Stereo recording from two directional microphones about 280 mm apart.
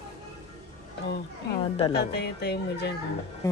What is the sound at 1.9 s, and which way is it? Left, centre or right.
Speech, left.